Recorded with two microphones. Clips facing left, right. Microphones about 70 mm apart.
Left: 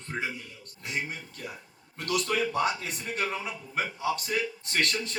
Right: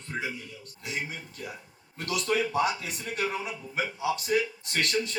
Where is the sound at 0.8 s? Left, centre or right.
Left.